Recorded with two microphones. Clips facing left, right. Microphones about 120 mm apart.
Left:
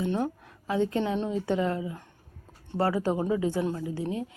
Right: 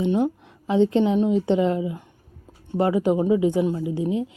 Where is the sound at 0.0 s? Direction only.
15° right (ahead or behind).